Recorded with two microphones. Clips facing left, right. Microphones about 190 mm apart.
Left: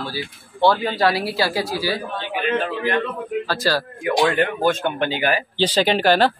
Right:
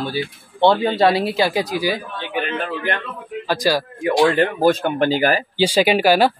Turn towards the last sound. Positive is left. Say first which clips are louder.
# right 2 dB
turn(degrees=-10)  # may be behind; listen again after turning